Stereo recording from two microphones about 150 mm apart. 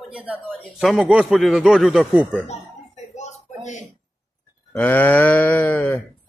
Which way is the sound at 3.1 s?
50° left (ahead or behind).